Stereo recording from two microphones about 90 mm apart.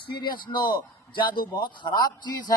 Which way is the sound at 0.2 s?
60° left (ahead or behind).